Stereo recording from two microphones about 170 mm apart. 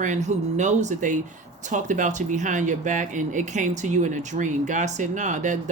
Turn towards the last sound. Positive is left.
turn(degrees=-45)  # may be behind; listen again after turning